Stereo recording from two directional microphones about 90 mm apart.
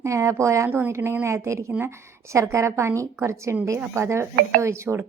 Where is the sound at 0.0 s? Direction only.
35° right (ahead or behind).